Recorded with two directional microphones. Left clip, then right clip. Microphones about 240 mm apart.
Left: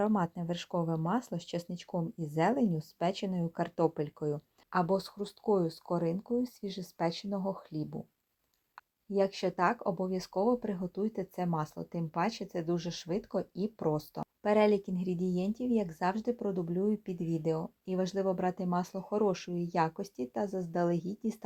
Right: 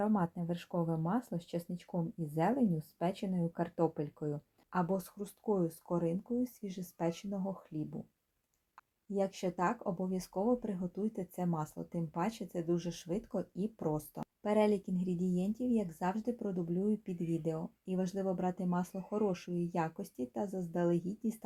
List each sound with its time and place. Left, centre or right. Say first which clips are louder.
0.0 s speech: left 3 dB; centre
9.1 s speech: left 5 dB; centre